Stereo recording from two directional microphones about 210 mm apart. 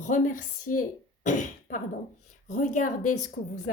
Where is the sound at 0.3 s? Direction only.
90° left.